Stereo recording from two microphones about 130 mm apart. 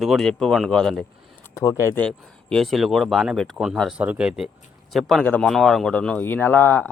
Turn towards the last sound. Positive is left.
turn(degrees=15)  # may be behind; listen again after turning